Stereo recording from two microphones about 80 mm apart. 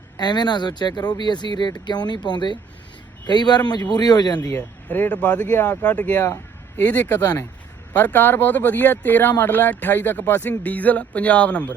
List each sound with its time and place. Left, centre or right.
0.2 s speech: left
4.5 s speech: left